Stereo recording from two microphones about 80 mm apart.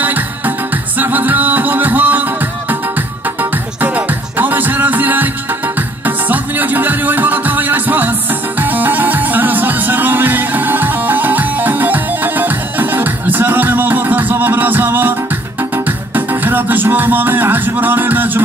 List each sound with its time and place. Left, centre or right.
0.9 s music: right
3.8 s music: right
16.2 s music: right